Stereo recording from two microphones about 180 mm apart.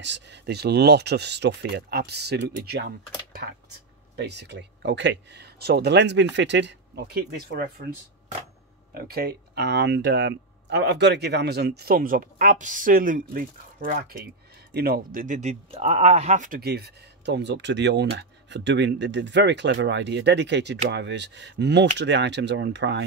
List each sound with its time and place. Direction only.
0.0 s speech: 75° right (ahead or behind)
4.2 s speech: 70° right (ahead or behind)
8.9 s speech: 60° right (ahead or behind)
15.7 s speech: 35° right (ahead or behind); by 23.0 s 75° right (ahead or behind)